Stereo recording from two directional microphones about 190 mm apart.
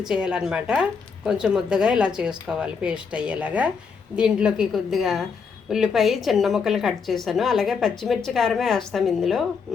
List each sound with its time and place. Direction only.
0.0 s speech: 5° right (ahead or behind)